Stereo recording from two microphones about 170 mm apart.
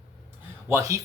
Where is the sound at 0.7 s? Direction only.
20° right (ahead or behind).